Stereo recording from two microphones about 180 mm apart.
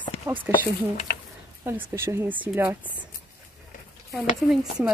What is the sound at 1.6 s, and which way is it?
Speech, 15° right (ahead or behind).